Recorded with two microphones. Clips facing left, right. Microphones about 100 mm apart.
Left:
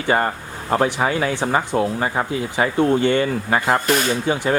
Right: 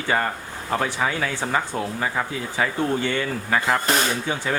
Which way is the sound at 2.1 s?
25° left (ahead or behind).